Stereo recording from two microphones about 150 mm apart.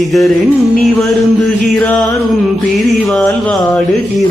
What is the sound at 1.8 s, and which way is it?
Music, 10° left (ahead or behind).